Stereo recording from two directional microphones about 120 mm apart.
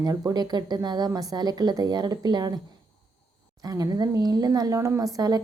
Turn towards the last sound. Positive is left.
turn(degrees=-30)  # may be behind; listen again after turning